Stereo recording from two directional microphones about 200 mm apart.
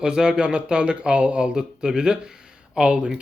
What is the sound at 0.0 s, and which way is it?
Speech, 5° right (ahead or behind).